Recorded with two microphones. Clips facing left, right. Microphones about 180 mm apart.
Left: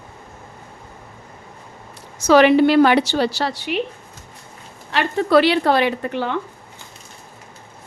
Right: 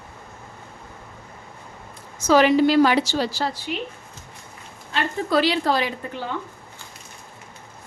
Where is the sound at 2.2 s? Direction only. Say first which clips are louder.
Left 4 dB; 70° left (ahead or behind).